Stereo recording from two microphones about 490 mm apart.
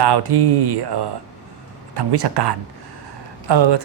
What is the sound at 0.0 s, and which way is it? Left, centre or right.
A man's voice, right.